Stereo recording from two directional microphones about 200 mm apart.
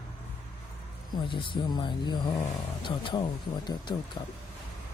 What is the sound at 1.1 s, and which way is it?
Speech, 25° left (ahead or behind).